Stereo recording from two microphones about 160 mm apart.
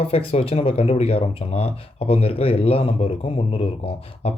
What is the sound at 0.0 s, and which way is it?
Speech, 35° left (ahead or behind).